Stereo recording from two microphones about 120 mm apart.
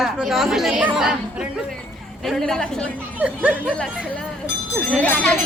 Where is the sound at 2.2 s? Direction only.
5° left (ahead or behind).